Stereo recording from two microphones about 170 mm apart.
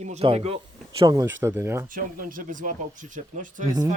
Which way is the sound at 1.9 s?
55° right (ahead or behind).